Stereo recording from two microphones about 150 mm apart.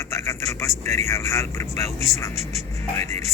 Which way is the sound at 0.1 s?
20° left (ahead or behind).